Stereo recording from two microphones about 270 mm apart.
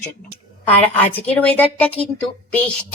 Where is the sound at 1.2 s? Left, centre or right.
Centre.